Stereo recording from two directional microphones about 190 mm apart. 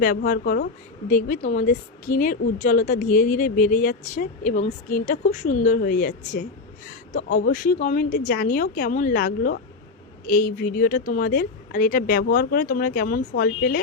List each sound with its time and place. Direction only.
0.0 s a woman's voice: 50° left (ahead or behind)